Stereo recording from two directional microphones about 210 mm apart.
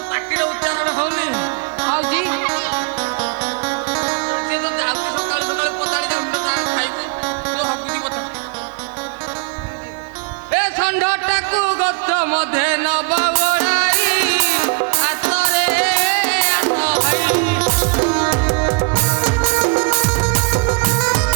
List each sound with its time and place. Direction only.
0.1 s music: 15° right (ahead or behind)
10.5 s a sound: 10° right (ahead or behind)
12.5 s music: 15° right (ahead or behind)
14.7 s music: 25° right (ahead or behind)
15.0 s music: 15° right (ahead or behind)
17.7 s music: 25° right (ahead or behind)